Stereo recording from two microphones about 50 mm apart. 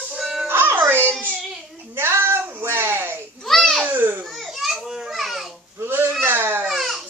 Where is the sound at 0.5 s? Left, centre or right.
Right.